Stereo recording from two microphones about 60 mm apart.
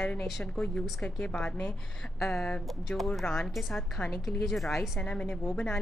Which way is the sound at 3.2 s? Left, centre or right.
Centre.